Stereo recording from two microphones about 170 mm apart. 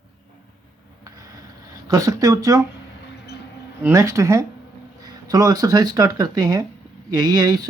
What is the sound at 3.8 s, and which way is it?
Speech, 15° right (ahead or behind).